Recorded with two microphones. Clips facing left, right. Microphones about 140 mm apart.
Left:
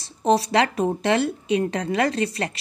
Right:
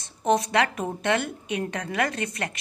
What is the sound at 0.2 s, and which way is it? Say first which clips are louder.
Speech: left 3 dB; 30° left (ahead or behind).